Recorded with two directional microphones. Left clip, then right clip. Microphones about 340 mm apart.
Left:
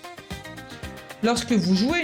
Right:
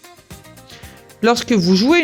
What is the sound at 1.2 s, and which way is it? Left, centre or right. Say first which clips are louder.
Speech: right 8 dB; right.